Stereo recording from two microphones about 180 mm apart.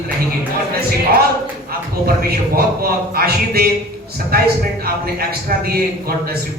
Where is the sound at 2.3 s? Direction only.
55° right (ahead or behind).